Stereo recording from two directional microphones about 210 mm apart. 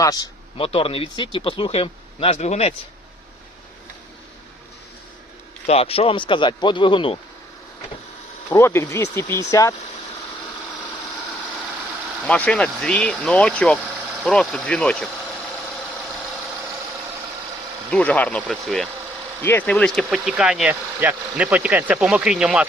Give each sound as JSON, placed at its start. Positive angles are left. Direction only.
{"t": 0.0, "sound": "speech", "side_deg": 15}
{"t": 5.6, "sound": "speech", "side_deg": 30}
{"t": 8.4, "sound": "speech", "side_deg": 10}
{"t": 12.2, "sound": "speech", "side_deg": 5}
{"t": 17.9, "sound": "speech", "side_deg": 5}